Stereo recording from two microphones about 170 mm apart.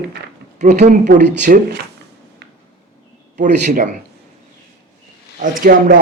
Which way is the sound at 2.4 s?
90° right.